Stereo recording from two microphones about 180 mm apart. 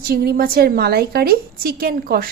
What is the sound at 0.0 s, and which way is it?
A woman's voice, 60° right (ahead or behind).